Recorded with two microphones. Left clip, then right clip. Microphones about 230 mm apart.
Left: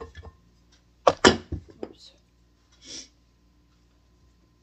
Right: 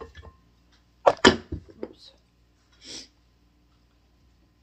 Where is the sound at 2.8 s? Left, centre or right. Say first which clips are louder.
Even; right.